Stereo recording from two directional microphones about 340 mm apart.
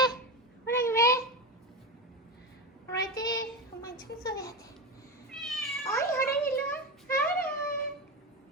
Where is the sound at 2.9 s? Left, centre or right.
Centre.